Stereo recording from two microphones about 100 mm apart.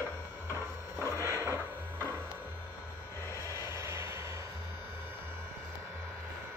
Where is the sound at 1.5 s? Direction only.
25° right (ahead or behind).